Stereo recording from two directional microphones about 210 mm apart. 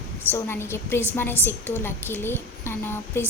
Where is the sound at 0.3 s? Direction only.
10° left (ahead or behind).